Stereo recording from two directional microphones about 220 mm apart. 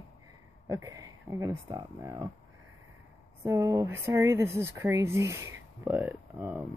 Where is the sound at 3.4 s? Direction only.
15° right (ahead or behind).